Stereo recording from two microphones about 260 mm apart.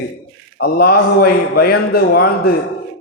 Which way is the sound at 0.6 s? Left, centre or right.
Left.